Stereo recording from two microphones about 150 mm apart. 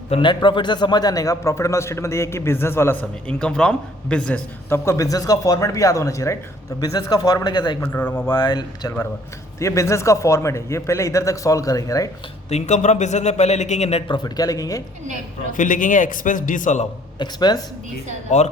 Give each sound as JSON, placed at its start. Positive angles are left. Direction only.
{"t": 0.1, "sound": "a man's voice", "side_deg": 30}
{"t": 4.9, "sound": "a man's voice", "side_deg": 20}
{"t": 7.8, "sound": "speech", "side_deg": 15}
{"t": 8.4, "sound": "a man's voice", "side_deg": 30}
{"t": 12.5, "sound": "a man's voice", "side_deg": 50}
{"t": 14.1, "sound": "a man's voice", "side_deg": 25}
{"t": 15.5, "sound": "a man's voice", "side_deg": 60}
{"t": 17.2, "sound": "a man's voice", "side_deg": 25}
{"t": 18.3, "sound": "a man's voice", "side_deg": 50}